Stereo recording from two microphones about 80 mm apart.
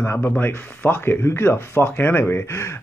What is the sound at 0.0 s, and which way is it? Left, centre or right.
Speech, left.